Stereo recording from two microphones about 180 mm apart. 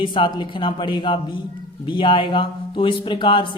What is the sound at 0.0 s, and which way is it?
Speech, 25° left (ahead or behind).